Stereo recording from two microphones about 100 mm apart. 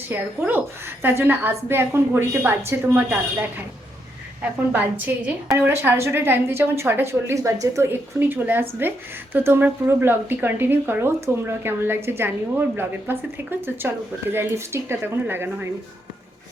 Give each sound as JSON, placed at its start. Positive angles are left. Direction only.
{"t": 0.1, "sound": "a woman's voice", "side_deg": -20}
{"t": 4.7, "sound": "a woman's voice", "side_deg": -15}